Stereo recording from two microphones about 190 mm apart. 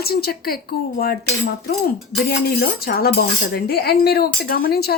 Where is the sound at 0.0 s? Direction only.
55° left (ahead or behind).